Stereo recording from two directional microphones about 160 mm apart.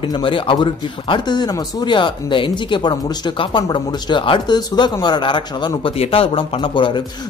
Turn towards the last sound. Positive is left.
turn(degrees=30)  # may be behind; listen again after turning